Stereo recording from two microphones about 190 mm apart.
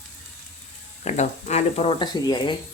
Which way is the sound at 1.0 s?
35° left (ahead or behind).